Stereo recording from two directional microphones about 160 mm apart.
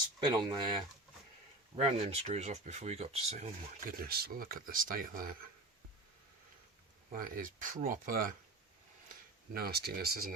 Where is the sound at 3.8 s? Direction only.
70° right (ahead or behind).